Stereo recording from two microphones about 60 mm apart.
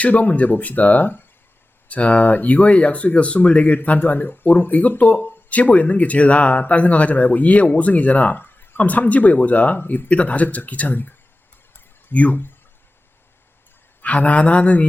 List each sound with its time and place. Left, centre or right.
0.0 s speech: left
1.9 s speech: left
14.0 s speech: left